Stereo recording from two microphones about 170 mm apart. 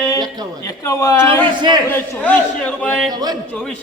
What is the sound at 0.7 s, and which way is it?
A man's voice, 20° left (ahead or behind).